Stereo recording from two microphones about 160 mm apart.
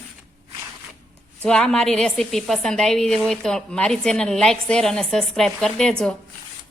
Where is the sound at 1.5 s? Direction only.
5° left (ahead or behind).